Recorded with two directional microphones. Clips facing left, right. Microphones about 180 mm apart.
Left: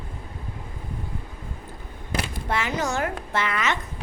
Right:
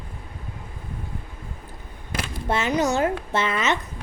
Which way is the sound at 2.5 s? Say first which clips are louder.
Right 5 dB; 20° right (ahead or behind).